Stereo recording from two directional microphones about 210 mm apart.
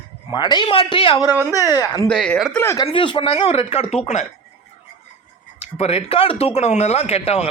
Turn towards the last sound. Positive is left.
turn(degrees=30)  # may be behind; listen again after turning